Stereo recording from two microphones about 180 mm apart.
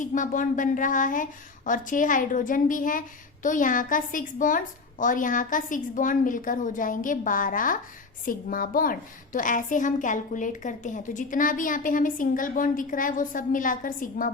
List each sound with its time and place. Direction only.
0.0 s a woman's voice: 45° left (ahead or behind)